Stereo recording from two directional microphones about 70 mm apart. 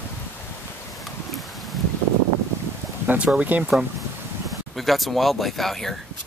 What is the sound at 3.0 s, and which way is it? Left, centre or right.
Speech, centre.